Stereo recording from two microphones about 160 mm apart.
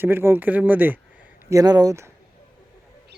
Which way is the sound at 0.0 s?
15° right (ahead or behind).